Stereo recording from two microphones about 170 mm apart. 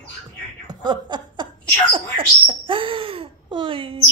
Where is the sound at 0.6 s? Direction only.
25° right (ahead or behind).